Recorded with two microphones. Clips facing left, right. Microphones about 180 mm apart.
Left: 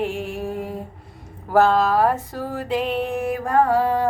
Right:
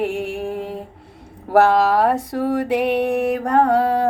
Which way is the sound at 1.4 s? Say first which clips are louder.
Right 2 dB; 75° right (ahead or behind).